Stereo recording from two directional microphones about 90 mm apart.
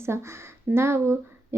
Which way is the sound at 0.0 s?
30° right (ahead or behind).